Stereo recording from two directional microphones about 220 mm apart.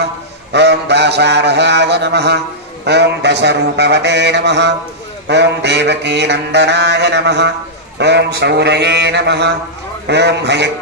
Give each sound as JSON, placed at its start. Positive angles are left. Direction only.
{"t": 0.0, "sound": "mantra", "side_deg": -50}